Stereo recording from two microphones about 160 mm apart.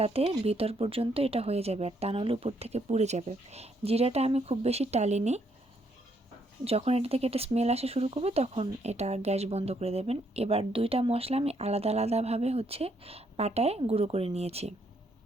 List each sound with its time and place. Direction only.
0.0 s speech: 40° right (ahead or behind)
6.7 s speech: 40° right (ahead or behind)